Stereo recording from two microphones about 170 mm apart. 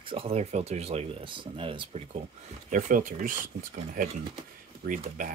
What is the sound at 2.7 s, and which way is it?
Speech, 50° right (ahead or behind).